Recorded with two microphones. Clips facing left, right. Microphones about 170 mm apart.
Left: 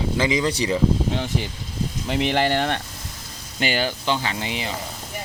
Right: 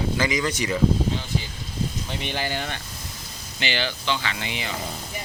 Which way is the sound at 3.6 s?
45° left (ahead or behind).